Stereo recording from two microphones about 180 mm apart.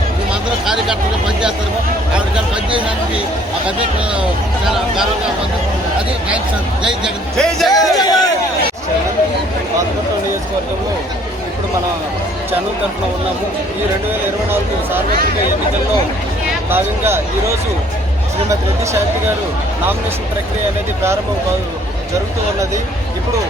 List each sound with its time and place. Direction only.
0.6 s vehicle: 5° right (ahead or behind)
6.8 s speech: centre (ahead or behind)
7.7 s speech: 20° left (ahead or behind)
14.1 s speech: 10° right (ahead or behind)
16.6 s speech: 15° right (ahead or behind)